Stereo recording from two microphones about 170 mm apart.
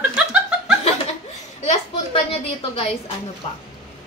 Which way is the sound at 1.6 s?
40° left (ahead or behind).